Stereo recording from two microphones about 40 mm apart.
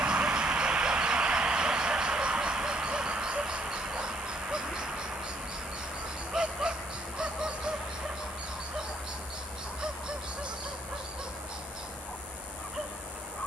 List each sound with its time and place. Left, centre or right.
0.0 s vehicle: right
6.3 s a sound: centre
7.2 s fowl: right